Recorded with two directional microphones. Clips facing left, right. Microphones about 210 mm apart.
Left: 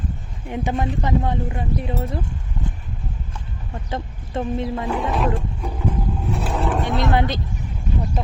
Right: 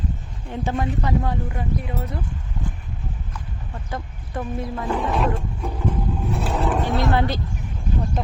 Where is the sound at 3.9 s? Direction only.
25° left (ahead or behind).